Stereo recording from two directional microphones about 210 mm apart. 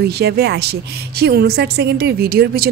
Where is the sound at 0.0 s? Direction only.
50° right (ahead or behind).